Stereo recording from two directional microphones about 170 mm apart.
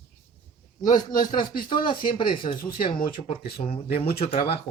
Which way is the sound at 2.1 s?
30° left (ahead or behind).